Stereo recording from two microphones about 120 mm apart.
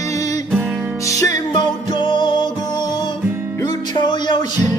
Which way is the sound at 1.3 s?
35° left (ahead or behind).